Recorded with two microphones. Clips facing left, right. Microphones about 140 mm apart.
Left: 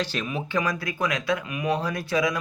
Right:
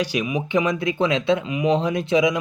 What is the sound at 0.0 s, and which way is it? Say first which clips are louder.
Speech: right 5 dB; 15° right (ahead or behind).